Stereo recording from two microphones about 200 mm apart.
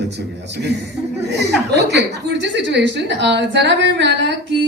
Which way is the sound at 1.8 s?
55° right (ahead or behind).